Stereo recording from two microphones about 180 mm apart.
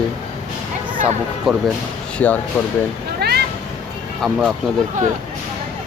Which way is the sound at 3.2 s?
60° right (ahead or behind).